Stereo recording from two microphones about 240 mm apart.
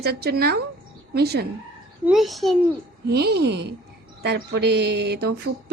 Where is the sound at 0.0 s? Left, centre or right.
Right.